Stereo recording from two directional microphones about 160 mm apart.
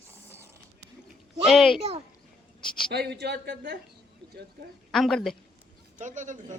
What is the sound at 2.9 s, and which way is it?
Speech, 90° right.